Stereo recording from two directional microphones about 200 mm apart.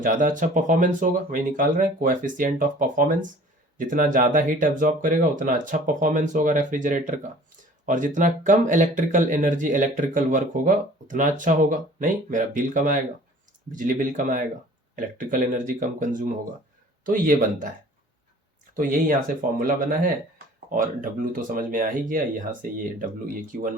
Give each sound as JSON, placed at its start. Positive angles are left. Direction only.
{"t": 0.0, "sound": "speech", "side_deg": -40}
{"t": 18.8, "sound": "speech", "side_deg": -45}